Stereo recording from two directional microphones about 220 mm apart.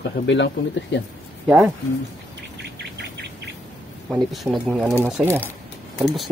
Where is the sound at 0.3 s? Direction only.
55° left (ahead or behind).